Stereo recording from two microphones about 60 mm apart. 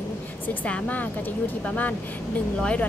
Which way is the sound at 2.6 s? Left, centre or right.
Centre.